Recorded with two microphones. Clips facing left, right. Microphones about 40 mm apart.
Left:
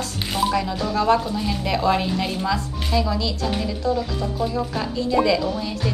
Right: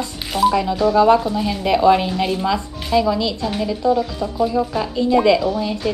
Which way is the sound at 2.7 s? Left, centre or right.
Centre.